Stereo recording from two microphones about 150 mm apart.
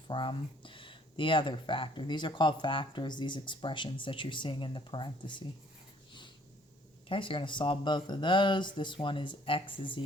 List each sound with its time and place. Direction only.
0.1 s speech: 30° left (ahead or behind)
7.1 s speech: 35° left (ahead or behind)